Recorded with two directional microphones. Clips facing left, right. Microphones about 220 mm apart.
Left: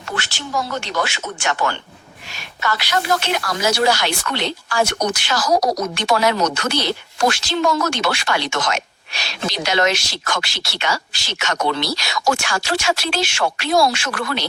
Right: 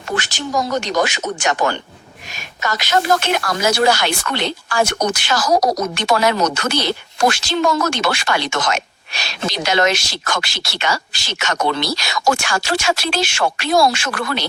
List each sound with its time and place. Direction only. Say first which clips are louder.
0.5 s speech: right 4 dB; 40° right (ahead or behind)
1.4 s a woman's voice: right 2 dB; 20° right (ahead or behind)
3.0 s speech: right 4 dB; 50° right (ahead or behind)